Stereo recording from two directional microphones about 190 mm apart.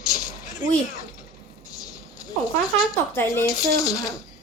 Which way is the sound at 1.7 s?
20° left (ahead or behind).